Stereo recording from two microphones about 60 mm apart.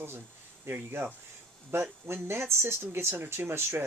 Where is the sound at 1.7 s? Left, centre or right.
Right.